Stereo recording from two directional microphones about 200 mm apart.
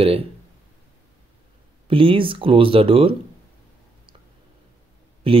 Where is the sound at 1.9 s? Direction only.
25° right (ahead or behind).